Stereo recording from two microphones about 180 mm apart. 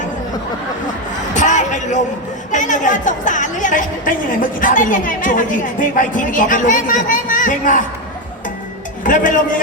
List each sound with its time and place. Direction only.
1.3 s a sound: 45° left (ahead or behind)
2.5 s a woman's voice: 45° left (ahead or behind)
9.0 s a woman's voice: 45° left (ahead or behind)